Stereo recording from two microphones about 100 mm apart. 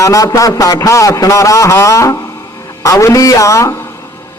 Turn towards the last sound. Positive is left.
turn(degrees=30)  # may be behind; listen again after turning